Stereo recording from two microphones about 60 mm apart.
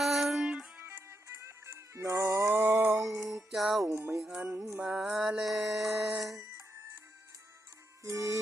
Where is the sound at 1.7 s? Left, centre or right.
Right.